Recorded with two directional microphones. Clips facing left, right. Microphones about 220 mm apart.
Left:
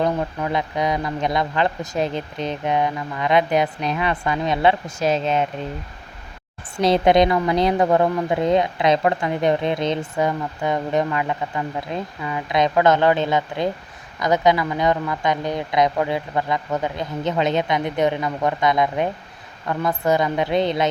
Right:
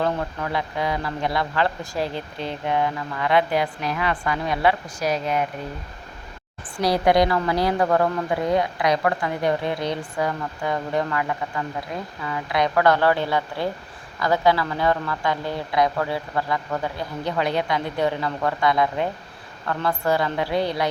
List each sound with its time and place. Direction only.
0.0 s a woman's voice: 20° left (ahead or behind)
6.7 s a woman's voice: 25° left (ahead or behind)